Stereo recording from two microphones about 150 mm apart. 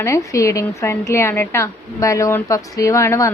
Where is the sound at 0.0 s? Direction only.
20° left (ahead or behind).